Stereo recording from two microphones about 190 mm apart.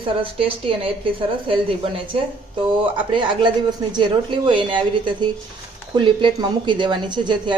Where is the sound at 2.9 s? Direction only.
25° right (ahead or behind).